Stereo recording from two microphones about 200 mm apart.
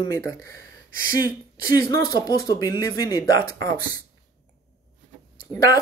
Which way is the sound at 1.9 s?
20° left (ahead or behind).